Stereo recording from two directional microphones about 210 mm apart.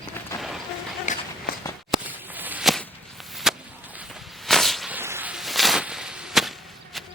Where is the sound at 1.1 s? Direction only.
35° left (ahead or behind).